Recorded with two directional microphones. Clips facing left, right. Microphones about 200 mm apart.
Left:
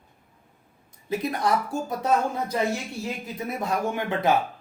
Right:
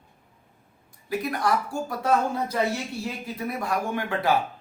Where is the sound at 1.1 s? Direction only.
20° left (ahead or behind).